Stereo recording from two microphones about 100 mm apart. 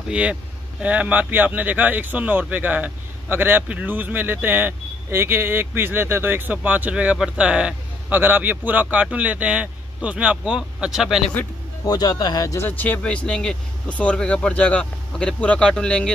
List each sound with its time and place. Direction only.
0.1 s speech: 10° right (ahead or behind)
11.8 s speech: 40° left (ahead or behind)
12.6 s speech: 15° left (ahead or behind)